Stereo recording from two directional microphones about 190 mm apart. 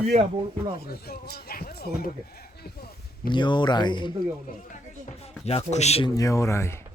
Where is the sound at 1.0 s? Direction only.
55° left (ahead or behind).